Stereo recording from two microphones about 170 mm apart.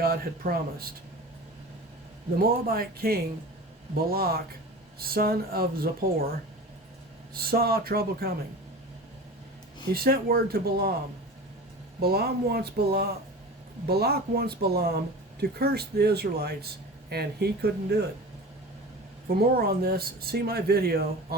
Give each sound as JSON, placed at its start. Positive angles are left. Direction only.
{"t": 0.0, "sound": "speech", "side_deg": -60}
{"t": 2.4, "sound": "speech", "side_deg": -65}
{"t": 7.3, "sound": "speech", "side_deg": -60}
{"t": 9.9, "sound": "speech", "side_deg": -60}
{"t": 11.9, "sound": "speech", "side_deg": -65}
{"t": 19.3, "sound": "speech", "side_deg": -65}